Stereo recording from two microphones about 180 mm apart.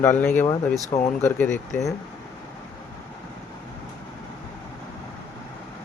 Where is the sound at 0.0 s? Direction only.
10° left (ahead or behind).